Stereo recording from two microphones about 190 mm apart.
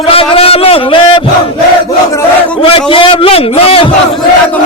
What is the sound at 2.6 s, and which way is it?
A man's voice, 30° left (ahead or behind).